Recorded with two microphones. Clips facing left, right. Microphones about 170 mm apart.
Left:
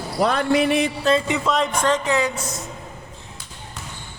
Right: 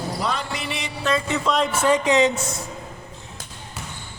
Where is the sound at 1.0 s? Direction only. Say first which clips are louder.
Even; 30° left (ahead or behind).